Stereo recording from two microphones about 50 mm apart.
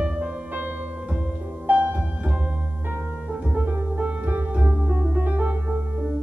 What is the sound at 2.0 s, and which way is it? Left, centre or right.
Music, right.